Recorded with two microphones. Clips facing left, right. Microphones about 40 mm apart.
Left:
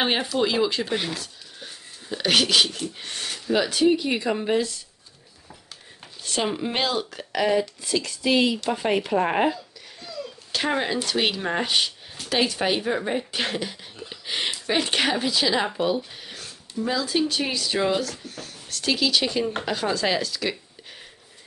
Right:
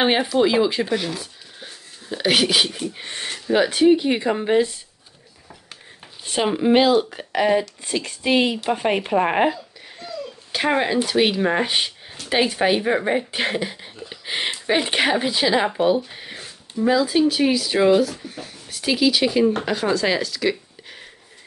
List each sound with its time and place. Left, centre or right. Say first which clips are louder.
0.0 s speech: right 5 dB; centre
6.2 s speech: right 6 dB; centre
7.8 s speech: right 1 dB; right
8.6 s a sound: right 3 dB; right
10.7 s speech: right 6 dB; centre
14.0 s a sound: right 2 dB; centre
14.7 s speech: right 4 dB; centre